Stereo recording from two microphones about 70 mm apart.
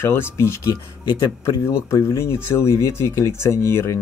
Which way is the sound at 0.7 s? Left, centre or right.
Left.